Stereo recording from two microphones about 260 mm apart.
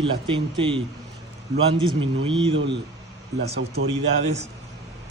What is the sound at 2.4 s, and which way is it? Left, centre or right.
Speech, centre.